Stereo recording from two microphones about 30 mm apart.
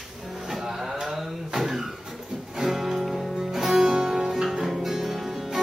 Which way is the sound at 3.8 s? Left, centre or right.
Right.